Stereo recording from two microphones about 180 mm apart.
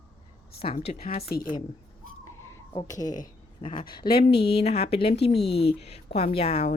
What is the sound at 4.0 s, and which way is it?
Speech, 60° left (ahead or behind).